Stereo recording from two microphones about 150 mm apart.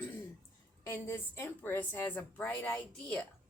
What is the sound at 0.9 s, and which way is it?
Speech, 20° left (ahead or behind).